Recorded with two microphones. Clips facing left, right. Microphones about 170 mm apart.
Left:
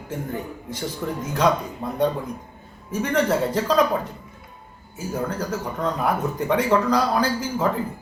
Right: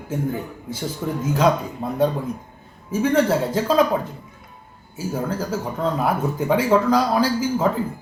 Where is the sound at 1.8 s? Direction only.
20° right (ahead or behind).